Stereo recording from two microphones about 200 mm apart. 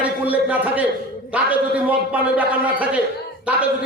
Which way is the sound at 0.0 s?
5° right (ahead or behind).